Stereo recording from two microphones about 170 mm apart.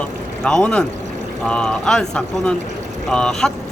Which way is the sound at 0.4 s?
5° left (ahead or behind).